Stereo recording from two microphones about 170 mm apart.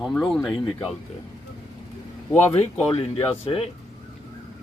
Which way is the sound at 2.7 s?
35° left (ahead or behind).